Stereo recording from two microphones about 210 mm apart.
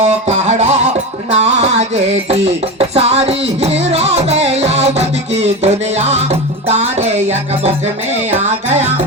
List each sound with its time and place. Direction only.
0.3 s music: 30° right (ahead or behind)